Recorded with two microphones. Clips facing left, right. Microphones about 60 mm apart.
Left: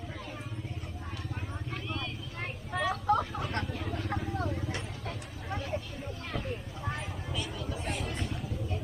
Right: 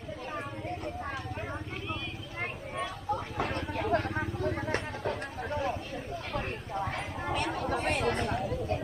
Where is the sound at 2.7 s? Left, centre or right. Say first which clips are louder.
Left 8 dB; left.